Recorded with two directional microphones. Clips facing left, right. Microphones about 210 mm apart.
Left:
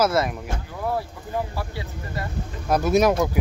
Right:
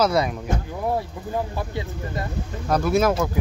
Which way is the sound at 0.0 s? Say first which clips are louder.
Right 1 dB; 5° left (ahead or behind).